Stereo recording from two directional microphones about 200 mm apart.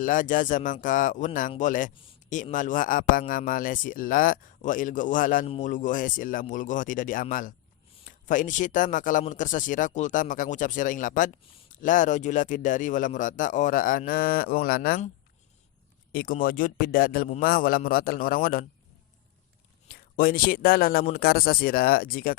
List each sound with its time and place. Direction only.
0.0 s a man's voice: 40° left (ahead or behind)
16.1 s speech: 45° left (ahead or behind)
19.9 s speech: 45° left (ahead or behind)